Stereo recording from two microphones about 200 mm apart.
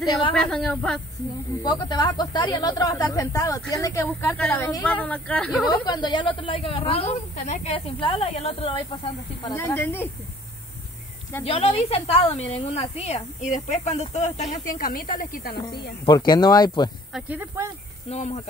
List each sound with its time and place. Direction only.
0.3 s a woman's voice: 5° left (ahead or behind)
1.6 s speech: 20° left (ahead or behind); by 5.7 s 5° left (ahead or behind)
5.7 s a woman's voice: 20° left (ahead or behind)
9.5 s speech: 10° left (ahead or behind)
11.4 s a woman's voice: 30° left (ahead or behind)
14.7 s speech: 45° left (ahead or behind)
16.1 s a woman's voice: 20° left (ahead or behind)
17.1 s speech: 10° right (ahead or behind)
18.1 s a woman's voice: 30° left (ahead or behind)